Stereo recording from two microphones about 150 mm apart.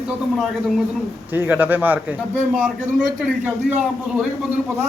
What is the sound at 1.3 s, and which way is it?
A man's voice, 10° right (ahead or behind).